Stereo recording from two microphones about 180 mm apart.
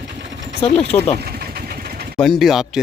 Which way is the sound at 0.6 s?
35° left (ahead or behind).